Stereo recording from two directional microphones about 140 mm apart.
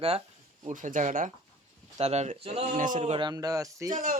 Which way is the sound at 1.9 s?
50° right (ahead or behind).